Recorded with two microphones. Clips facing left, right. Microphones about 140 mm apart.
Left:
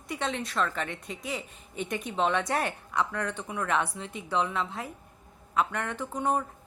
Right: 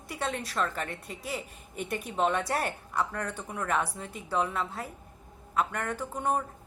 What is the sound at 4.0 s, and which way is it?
Speech, 45° right (ahead or behind).